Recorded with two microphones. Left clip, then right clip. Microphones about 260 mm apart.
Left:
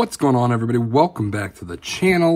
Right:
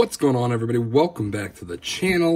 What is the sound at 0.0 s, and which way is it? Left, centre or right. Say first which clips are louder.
Speech: left 2 dB; centre.